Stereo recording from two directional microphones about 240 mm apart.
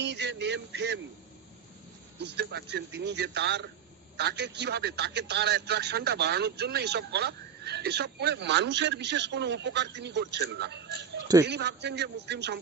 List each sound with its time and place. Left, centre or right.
0.0 s male singing: right
2.2 s a man's voice: right